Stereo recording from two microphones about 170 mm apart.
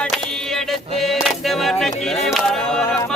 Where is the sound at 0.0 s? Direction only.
Centre (ahead or behind).